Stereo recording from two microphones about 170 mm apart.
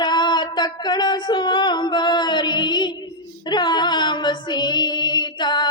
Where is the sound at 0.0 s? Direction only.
25° left (ahead or behind).